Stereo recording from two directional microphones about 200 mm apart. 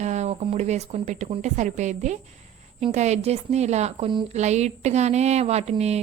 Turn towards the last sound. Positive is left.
turn(degrees=-30)  # may be behind; listen again after turning